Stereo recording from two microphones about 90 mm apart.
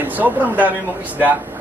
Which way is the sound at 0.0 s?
20° right (ahead or behind).